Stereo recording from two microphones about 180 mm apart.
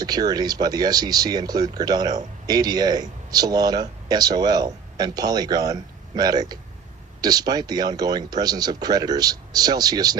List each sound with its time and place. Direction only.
0.0 s speech: 20° right (ahead or behind)